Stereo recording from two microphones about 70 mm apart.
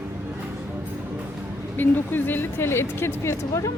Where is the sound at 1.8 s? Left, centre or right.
Left.